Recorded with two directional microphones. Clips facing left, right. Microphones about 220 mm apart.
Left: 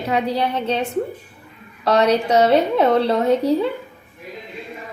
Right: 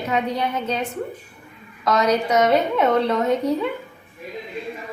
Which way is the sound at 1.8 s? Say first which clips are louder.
Left 3 dB; 30° left (ahead or behind).